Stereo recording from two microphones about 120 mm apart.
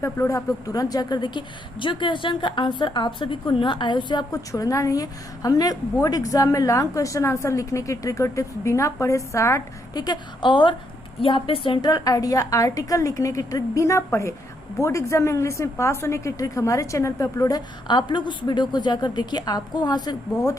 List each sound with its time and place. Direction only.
0.0 s a woman's voice: 25° left (ahead or behind)
17.8 s a woman's voice: 40° left (ahead or behind)